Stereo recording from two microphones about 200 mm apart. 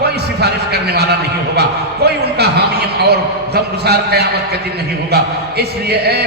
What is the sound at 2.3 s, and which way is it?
A man's voice, 55° right (ahead or behind).